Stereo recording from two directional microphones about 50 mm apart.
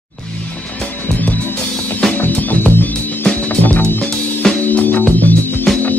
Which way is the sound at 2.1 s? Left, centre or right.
Left.